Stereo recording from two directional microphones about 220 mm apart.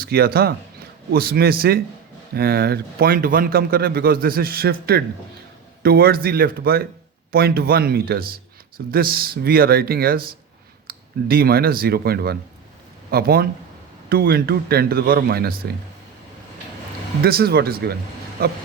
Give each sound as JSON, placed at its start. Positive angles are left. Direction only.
{"t": 0.0, "sound": "a man's voice", "side_deg": -45}
{"t": 17.2, "sound": "a man's voice", "side_deg": -45}